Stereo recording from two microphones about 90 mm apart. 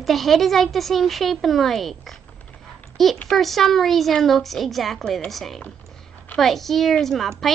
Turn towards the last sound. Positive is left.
turn(degrees=5)  # may be behind; listen again after turning